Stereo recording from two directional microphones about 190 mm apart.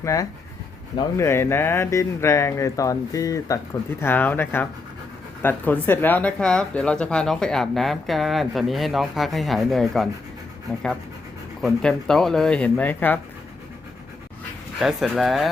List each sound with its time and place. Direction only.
0.0 s speech: 15° left (ahead or behind); by 10.1 s centre (ahead or behind)
11.6 s speech: 5° left (ahead or behind)
14.8 s speech: centre (ahead or behind)